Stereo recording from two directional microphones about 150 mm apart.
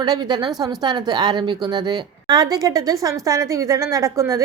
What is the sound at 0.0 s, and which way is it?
A woman's voice, 30° right (ahead or behind).